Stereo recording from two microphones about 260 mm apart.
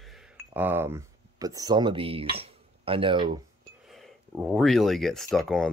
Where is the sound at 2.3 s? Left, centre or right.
Right.